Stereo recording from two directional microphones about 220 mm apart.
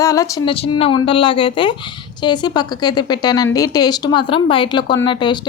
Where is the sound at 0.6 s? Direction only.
25° left (ahead or behind).